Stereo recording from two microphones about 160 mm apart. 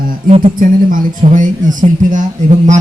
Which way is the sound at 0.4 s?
55° right (ahead or behind).